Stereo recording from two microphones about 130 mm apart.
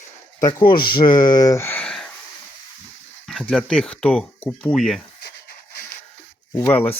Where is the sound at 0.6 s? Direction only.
40° left (ahead or behind); by 1.8 s 20° left (ahead or behind).